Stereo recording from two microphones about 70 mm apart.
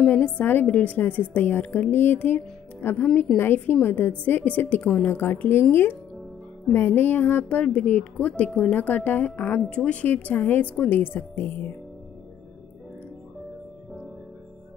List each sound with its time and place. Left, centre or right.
0.1 s a woman's voice: left
7.0 s a woman's voice: left